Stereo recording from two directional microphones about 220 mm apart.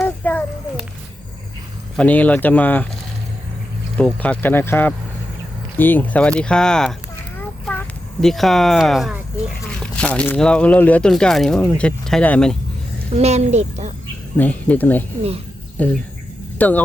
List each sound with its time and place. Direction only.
0.0 s a sound: 5° left (ahead or behind)
2.0 s speech: 5° left (ahead or behind)
3.9 s speech: 5° left (ahead or behind)
13.1 s speech: 30° right (ahead or behind)
14.3 s speech: 5° left (ahead or behind)